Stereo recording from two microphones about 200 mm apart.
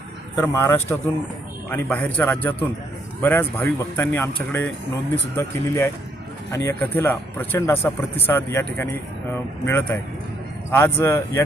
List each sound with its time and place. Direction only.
0.3 s speech: 10° left (ahead or behind)